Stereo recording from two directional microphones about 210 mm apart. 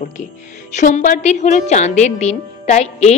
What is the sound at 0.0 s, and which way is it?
A woman's voice, 35° left (ahead or behind).